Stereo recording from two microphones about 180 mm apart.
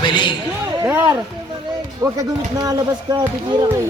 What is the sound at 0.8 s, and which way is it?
Speech, 10° right (ahead or behind).